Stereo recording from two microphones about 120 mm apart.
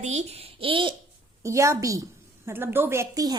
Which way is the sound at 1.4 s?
25° right (ahead or behind).